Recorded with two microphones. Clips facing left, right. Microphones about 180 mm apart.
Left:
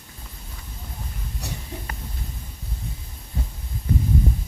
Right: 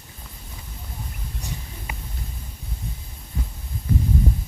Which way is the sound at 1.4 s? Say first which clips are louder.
Left 1 dB; 70° left (ahead or behind).